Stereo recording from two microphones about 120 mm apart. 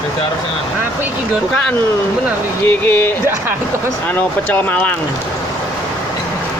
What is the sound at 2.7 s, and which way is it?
Speech, 15° left (ahead or behind).